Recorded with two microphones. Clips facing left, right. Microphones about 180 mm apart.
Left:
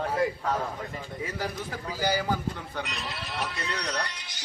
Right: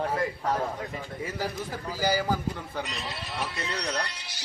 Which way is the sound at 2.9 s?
25° right (ahead or behind).